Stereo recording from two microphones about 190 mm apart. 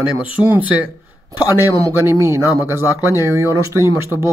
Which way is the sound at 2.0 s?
15° right (ahead or behind).